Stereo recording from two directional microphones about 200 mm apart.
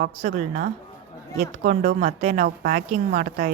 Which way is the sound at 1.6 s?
45° right (ahead or behind).